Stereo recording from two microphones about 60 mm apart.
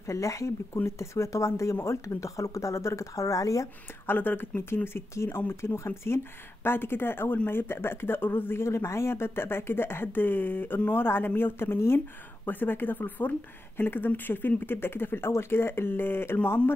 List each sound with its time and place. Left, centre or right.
0.0 s speech: left
4.0 s speech: left
12.4 s speech: left